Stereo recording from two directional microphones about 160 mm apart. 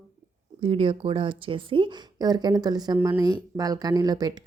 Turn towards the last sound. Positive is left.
turn(degrees=-25)  # may be behind; listen again after turning